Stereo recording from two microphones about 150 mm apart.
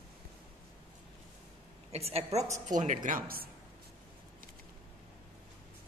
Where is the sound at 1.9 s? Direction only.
45° right (ahead or behind).